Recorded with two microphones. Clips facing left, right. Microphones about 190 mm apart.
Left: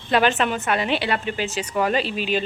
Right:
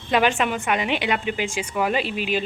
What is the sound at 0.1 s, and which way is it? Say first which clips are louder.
A woman's voice: left 1 dB; 10° right (ahead or behind).